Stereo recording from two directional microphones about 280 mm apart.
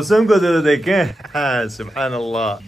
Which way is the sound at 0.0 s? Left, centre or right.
Centre.